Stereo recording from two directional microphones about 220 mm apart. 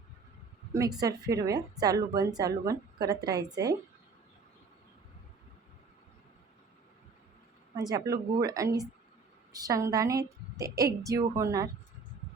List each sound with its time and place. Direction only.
0.7 s a woman's voice: 15° right (ahead or behind)
7.8 s a woman's voice: 15° right (ahead or behind)